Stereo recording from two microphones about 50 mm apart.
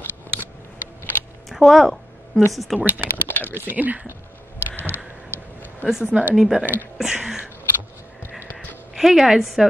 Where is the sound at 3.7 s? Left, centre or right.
Right.